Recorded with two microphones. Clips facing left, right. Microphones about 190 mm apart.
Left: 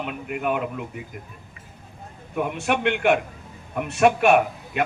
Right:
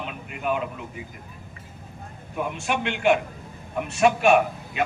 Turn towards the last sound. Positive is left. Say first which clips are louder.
# left 1 dB
turn(degrees=55)  # may be behind; listen again after turning